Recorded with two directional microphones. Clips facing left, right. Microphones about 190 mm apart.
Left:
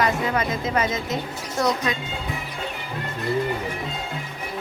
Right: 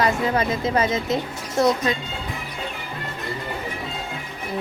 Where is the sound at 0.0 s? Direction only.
30° right (ahead or behind).